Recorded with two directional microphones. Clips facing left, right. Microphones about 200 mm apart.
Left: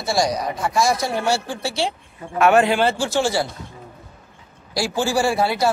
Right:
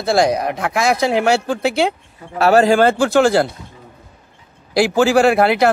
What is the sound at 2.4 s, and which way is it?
A man's voice, 40° right (ahead or behind).